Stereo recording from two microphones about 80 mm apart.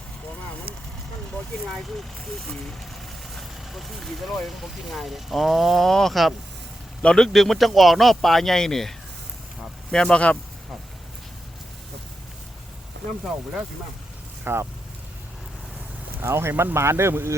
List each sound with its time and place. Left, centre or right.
3.3 s a man's voice: centre
14.4 s speech: right
16.2 s speech: right